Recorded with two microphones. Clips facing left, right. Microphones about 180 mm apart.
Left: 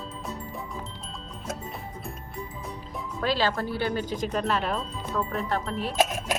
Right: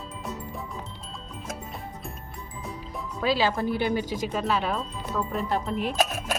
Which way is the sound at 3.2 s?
10° right (ahead or behind).